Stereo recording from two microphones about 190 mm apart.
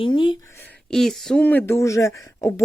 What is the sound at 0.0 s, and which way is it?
Speech, 25° left (ahead or behind).